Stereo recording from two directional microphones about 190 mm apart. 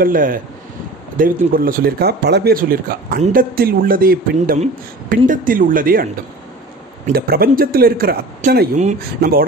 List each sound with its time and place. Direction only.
0.0 s speech: 45° right (ahead or behind)
7.1 s speech: 50° right (ahead or behind)
9.2 s speech: 55° right (ahead or behind)